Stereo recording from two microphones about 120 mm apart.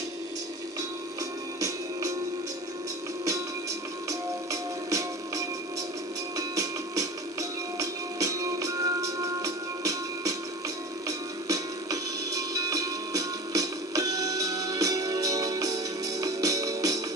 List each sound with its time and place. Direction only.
4.1 s music: 25° right (ahead or behind)